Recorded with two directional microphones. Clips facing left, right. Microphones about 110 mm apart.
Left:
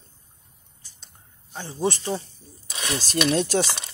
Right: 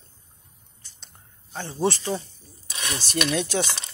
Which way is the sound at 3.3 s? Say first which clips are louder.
Left 4 dB; 45° left (ahead or behind).